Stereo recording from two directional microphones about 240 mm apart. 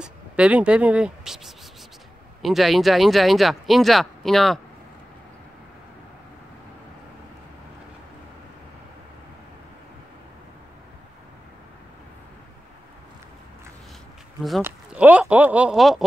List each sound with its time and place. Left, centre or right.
0.0 s speech: centre
14.4 s speech: centre